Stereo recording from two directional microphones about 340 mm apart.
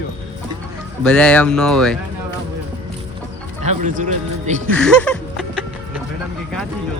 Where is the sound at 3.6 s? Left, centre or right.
Right.